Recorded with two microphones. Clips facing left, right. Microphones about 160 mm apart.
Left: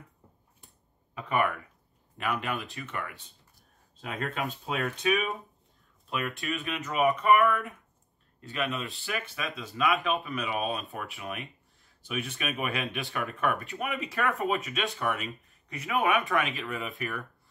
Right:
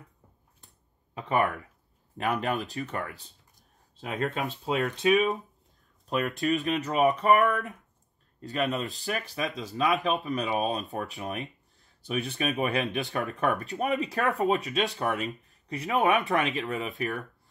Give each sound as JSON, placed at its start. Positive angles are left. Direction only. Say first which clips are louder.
{"t": 1.1, "sound": "speech", "louder": "right 2 dB", "side_deg": -35}